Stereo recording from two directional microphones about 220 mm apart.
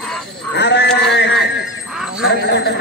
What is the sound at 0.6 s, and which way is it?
Speech, 50° left (ahead or behind).